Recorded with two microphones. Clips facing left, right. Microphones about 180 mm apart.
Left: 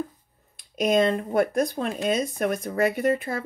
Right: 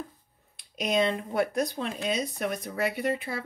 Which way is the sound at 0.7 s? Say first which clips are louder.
Left 5 dB; 45° left (ahead or behind).